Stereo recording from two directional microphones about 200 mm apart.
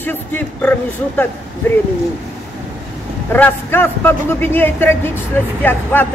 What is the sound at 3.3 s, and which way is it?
A man's voice, 10° left (ahead or behind).